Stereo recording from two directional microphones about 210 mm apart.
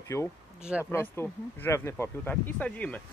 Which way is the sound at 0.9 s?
10° left (ahead or behind).